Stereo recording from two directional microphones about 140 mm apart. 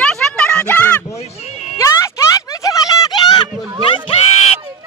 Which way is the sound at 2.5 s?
25° left (ahead or behind).